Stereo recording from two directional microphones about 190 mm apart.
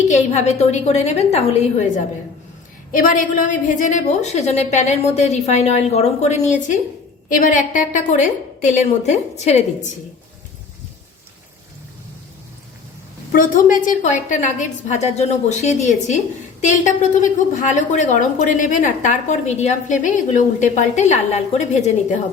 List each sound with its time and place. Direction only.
0.1 s a woman's voice: 35° left (ahead or behind)
2.9 s a woman's voice: 45° left (ahead or behind)
13.3 s a woman's voice: 45° left (ahead or behind)